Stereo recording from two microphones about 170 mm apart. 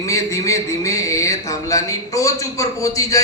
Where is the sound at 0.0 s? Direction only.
20° left (ahead or behind).